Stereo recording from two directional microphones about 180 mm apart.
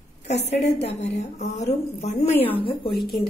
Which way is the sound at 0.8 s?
40° left (ahead or behind).